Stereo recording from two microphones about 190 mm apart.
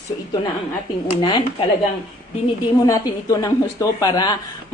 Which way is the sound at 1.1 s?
25° left (ahead or behind).